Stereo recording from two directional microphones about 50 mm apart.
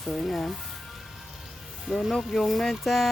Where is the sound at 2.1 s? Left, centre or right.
Centre.